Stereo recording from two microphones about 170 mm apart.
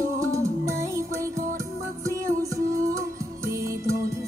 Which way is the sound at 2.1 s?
20° right (ahead or behind).